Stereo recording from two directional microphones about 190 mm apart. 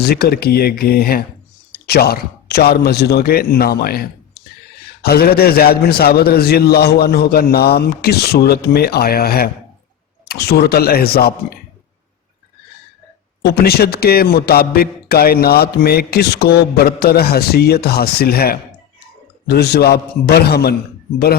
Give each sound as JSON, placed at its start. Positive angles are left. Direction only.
{"t": 0.0, "sound": "a man's voice", "side_deg": 55}
{"t": 13.4, "sound": "a man's voice", "side_deg": 55}
{"t": 19.5, "sound": "a man's voice", "side_deg": 55}